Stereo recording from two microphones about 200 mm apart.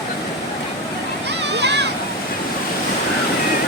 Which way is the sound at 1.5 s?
60° right (ahead or behind).